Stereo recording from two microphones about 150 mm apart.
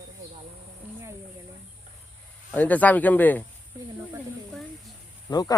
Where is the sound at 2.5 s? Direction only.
10° left (ahead or behind).